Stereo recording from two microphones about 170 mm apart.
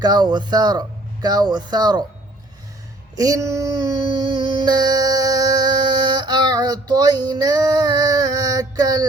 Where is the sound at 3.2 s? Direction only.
20° right (ahead or behind).